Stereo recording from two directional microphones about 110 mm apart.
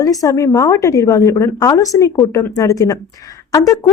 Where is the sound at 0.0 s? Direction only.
35° left (ahead or behind).